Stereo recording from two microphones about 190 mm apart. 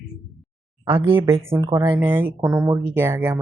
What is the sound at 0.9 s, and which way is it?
Speech, 10° right (ahead or behind).